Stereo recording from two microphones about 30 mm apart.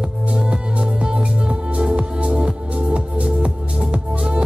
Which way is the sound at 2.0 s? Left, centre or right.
Right.